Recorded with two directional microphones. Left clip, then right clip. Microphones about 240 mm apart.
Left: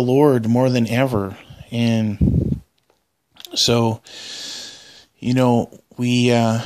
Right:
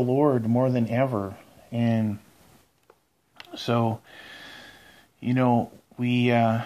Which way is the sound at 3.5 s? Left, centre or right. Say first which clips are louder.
Left 8 dB; left.